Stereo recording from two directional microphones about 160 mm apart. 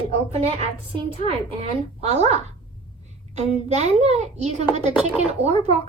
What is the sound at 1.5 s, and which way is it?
A child's voice, 40° right (ahead or behind).